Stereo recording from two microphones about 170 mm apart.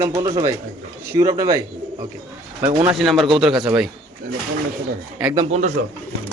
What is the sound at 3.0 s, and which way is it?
Speech, centre (ahead or behind).